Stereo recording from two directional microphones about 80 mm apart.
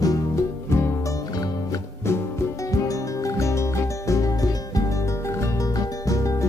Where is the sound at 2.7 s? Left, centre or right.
Left.